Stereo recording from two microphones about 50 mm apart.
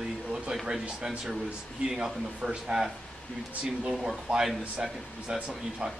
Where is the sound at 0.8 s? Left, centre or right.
Right.